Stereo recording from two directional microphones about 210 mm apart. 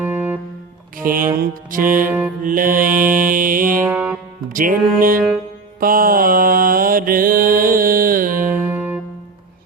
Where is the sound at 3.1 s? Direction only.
40° right (ahead or behind).